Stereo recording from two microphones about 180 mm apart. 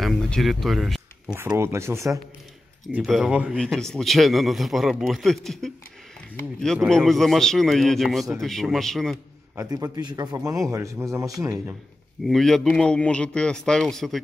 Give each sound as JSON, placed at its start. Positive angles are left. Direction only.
{"t": 0.0, "sound": "speech", "side_deg": 0}
{"t": 1.3, "sound": "speech", "side_deg": -15}
{"t": 2.9, "sound": "speech", "side_deg": 0}
{"t": 9.6, "sound": "a man's voice", "side_deg": -20}
{"t": 12.3, "sound": "speech", "side_deg": 0}